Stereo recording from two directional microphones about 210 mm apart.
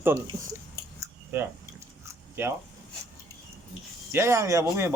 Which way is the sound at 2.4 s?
10° right (ahead or behind).